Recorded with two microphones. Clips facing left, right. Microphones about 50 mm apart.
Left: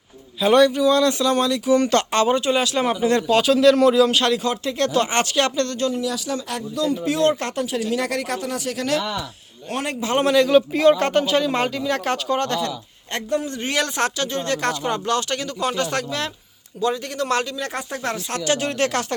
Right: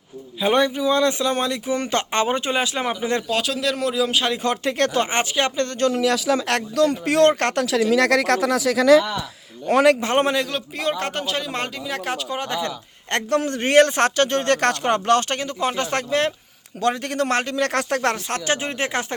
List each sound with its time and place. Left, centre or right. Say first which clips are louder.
0.3 s speech: left 4 dB; centre
2.8 s speech: left 4 dB; centre
3.2 s speech: left 8 dB; centre
4.4 s speech: right 1 dB; right
4.9 s speech: left 1 dB; centre
5.9 s speech: right 5 dB; right
10.0 s speech: right 1 dB; right
10.3 s speech: left 9 dB; centre
12.5 s speech: left 1 dB; centre
13.1 s a man's voice: right 3 dB; right
15.4 s speech: even; right
16.8 s a man's voice: right 1 dB; right
18.3 s speech: left 1 dB; right